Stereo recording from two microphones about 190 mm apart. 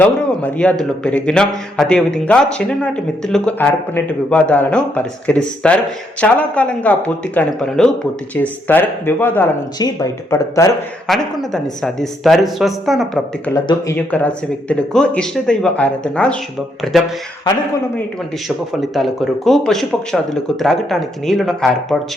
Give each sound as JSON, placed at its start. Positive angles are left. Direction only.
{"t": 0.0, "sound": "a man's voice", "side_deg": 5}
{"t": 11.1, "sound": "a man's voice", "side_deg": 0}
{"t": 13.5, "sound": "a man's voice", "side_deg": 15}
{"t": 18.4, "sound": "a man's voice", "side_deg": 0}